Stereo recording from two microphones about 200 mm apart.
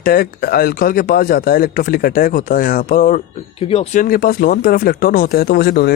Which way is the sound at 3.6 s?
30° left (ahead or behind).